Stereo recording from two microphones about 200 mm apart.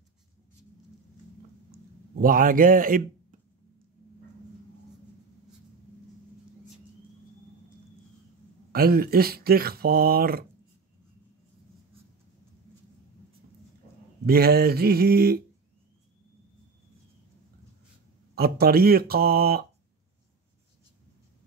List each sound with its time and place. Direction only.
1.7 s a sound: 45° right (ahead or behind)
8.7 s speech: 50° right (ahead or behind)
14.2 s speech: 50° right (ahead or behind)
18.3 s speech: 50° right (ahead or behind)